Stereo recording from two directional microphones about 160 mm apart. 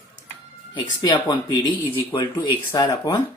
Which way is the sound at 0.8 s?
25° left (ahead or behind).